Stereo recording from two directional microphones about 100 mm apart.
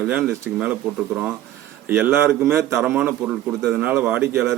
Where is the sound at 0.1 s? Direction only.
10° right (ahead or behind).